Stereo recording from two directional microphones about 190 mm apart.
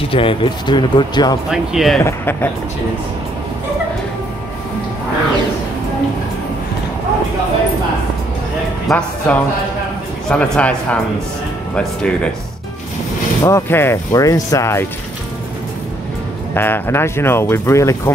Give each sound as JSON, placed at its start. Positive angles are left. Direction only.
{"t": 0.1, "sound": "speech", "side_deg": 25}
{"t": 1.5, "sound": "speech", "side_deg": 0}
{"t": 2.0, "sound": "speech", "side_deg": 10}
{"t": 8.8, "sound": "speech", "side_deg": 5}
{"t": 13.4, "sound": "speech", "side_deg": 15}
{"t": 16.5, "sound": "speech", "side_deg": 10}